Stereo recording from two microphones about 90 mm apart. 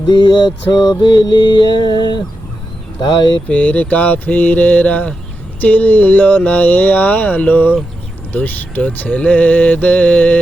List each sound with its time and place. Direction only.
0.1 s music: 60° left (ahead or behind)
3.5 s mantra: 15° left (ahead or behind)
5.5 s speech: 20° left (ahead or behind)